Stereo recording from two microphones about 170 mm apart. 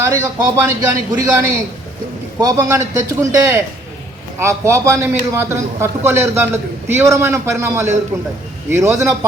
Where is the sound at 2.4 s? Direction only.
20° right (ahead or behind).